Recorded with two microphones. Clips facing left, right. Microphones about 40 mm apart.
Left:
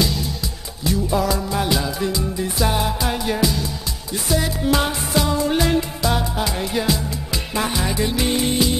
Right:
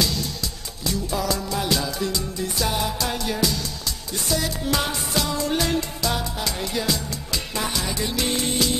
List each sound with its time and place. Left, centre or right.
0.0 s music: centre